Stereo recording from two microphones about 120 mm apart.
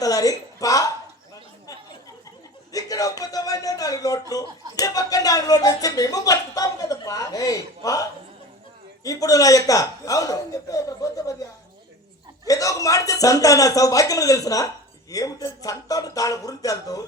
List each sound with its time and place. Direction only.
0.0 s a man's voice: 30° left (ahead or behind)
2.7 s a man's voice: 30° left (ahead or behind)
9.0 s a man's voice: 30° left (ahead or behind)
12.5 s a man's voice: 30° left (ahead or behind)